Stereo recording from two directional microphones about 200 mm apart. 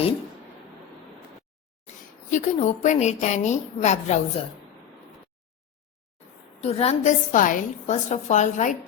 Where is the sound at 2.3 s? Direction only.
35° left (ahead or behind).